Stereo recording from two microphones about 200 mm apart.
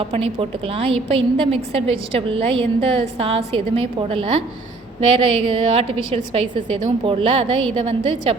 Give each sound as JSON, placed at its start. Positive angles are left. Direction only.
{"t": 0.0, "sound": "a woman's voice", "side_deg": -25}
{"t": 7.0, "sound": "a woman's voice", "side_deg": -25}